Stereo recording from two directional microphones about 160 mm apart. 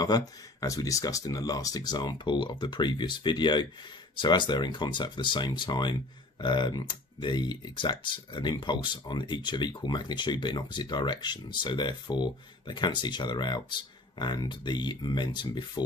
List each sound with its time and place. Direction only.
0.1 s speech: 25° left (ahead or behind)